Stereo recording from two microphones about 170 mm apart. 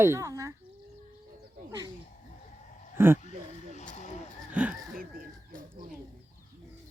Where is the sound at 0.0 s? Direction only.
15° right (ahead or behind).